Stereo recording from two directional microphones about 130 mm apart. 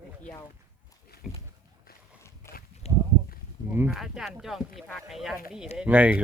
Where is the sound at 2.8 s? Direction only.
55° left (ahead or behind).